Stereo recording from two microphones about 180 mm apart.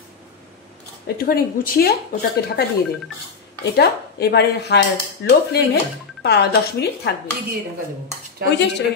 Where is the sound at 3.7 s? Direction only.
65° left (ahead or behind).